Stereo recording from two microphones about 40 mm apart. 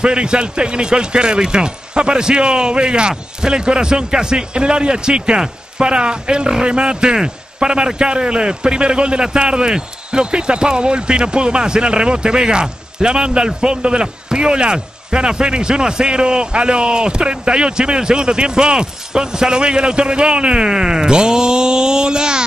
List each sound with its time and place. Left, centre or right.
0.0 s a man's voice: right